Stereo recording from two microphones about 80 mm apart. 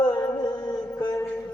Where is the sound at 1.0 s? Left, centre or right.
Left.